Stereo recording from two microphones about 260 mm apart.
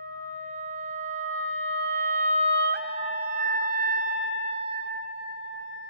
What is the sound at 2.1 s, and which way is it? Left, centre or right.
Music, right.